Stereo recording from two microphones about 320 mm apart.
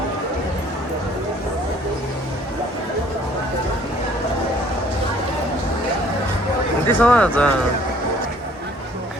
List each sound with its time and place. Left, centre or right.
6.8 s speech: centre